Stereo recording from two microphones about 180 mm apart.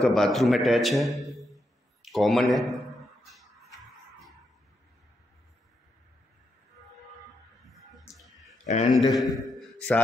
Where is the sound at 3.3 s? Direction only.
Centre (ahead or behind).